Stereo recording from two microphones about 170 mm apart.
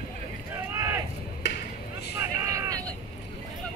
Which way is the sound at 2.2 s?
20° right (ahead or behind).